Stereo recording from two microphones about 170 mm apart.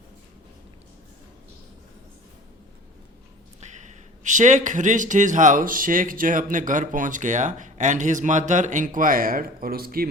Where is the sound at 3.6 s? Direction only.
45° right (ahead or behind).